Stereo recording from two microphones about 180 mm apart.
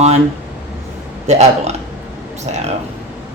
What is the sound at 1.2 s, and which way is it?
Speech, 40° right (ahead or behind).